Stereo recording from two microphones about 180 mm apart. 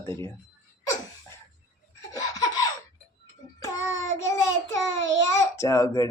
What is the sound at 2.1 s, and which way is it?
Laughter, 20° left (ahead or behind).